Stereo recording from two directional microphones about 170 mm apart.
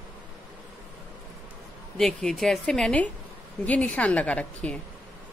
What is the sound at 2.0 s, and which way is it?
A woman's voice, centre (ahead or behind).